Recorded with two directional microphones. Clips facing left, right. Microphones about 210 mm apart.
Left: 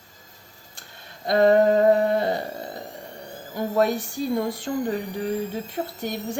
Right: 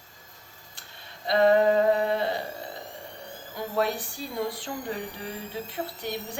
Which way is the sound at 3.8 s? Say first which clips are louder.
Left 5 dB; 45° left (ahead or behind).